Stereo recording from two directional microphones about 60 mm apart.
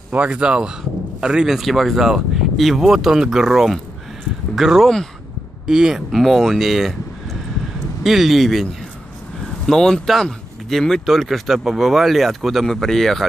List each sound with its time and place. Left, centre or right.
0.1 s speech: right; by 8.6 s centre
9.7 s speech: centre